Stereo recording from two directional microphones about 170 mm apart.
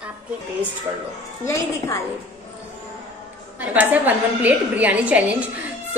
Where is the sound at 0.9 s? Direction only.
15° right (ahead or behind).